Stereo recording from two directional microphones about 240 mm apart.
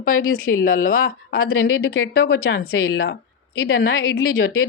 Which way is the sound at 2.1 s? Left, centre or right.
Left.